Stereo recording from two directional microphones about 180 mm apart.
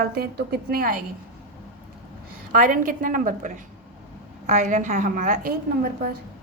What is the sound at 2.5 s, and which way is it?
A woman's voice, 45° right (ahead or behind).